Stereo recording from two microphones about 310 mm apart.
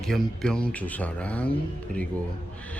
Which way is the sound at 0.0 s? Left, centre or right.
Centre.